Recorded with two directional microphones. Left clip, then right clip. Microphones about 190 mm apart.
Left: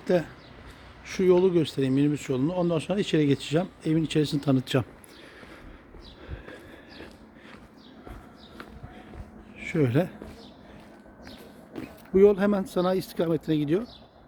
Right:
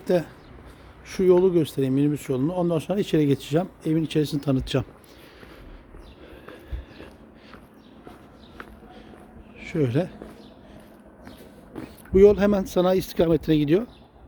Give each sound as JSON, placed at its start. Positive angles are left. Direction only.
{"t": 0.0, "sound": "speech", "side_deg": -5}
{"t": 9.6, "sound": "speech", "side_deg": 10}
{"t": 11.7, "sound": "speech", "side_deg": -10}